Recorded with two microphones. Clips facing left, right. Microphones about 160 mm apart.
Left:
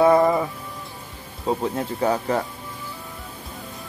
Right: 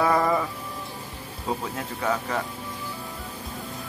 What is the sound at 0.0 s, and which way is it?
Music, 25° left (ahead or behind).